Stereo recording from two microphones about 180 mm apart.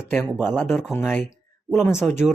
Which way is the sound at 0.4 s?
10° left (ahead or behind).